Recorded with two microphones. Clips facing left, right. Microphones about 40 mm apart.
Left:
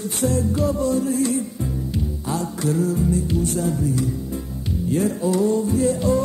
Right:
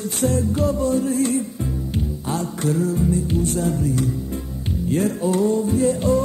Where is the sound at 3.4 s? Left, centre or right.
Right.